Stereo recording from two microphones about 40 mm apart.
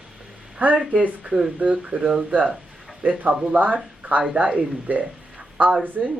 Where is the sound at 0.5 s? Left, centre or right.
Right.